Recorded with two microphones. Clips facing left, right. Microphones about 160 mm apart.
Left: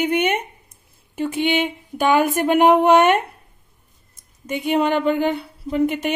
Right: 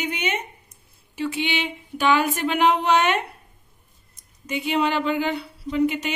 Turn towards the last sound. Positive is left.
turn(degrees=55)  # may be behind; listen again after turning